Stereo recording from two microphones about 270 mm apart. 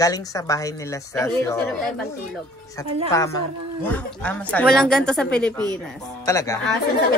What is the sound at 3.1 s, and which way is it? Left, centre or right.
A woman's voice, centre.